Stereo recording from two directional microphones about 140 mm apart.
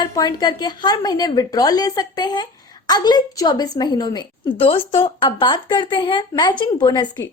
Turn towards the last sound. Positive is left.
turn(degrees=30)  # may be behind; listen again after turning